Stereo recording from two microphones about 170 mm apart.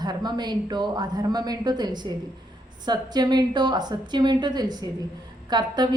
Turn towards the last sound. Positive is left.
turn(degrees=-25)  # may be behind; listen again after turning